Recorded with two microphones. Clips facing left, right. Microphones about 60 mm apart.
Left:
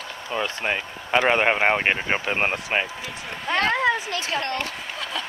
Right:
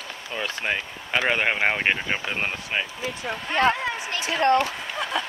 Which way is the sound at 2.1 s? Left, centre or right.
Left.